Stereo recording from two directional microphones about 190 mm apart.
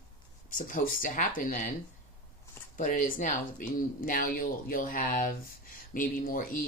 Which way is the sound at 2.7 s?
40° left (ahead or behind).